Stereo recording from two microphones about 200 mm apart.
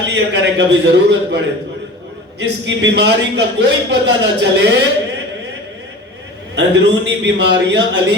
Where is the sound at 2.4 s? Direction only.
60° right (ahead or behind).